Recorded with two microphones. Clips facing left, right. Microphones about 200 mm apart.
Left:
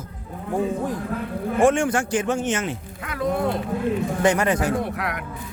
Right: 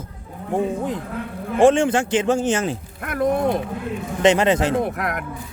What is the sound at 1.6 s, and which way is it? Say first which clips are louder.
A man's voice: right 4 dB; 25° right (ahead or behind).